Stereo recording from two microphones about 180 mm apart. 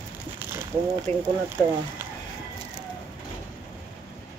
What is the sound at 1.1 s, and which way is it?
Speech, 35° right (ahead or behind).